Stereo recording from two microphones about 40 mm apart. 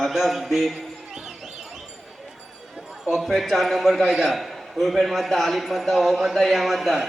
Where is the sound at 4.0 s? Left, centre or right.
Right.